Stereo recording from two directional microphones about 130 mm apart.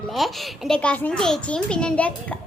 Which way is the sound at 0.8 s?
10° left (ahead or behind).